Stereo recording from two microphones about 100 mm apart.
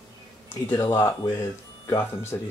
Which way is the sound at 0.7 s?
25° left (ahead or behind).